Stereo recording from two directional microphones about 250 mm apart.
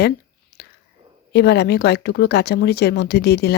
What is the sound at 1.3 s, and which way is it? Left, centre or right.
Speech, left.